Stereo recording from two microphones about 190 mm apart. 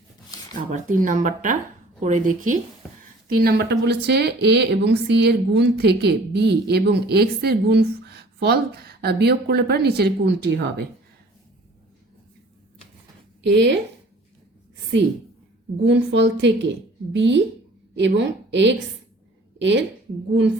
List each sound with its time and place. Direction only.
0.5 s a woman's voice: 45° right (ahead or behind)
3.2 s speech: 55° right (ahead or behind)
13.4 s a woman's voice: 70° right (ahead or behind)
15.8 s a woman's voice: 70° right (ahead or behind)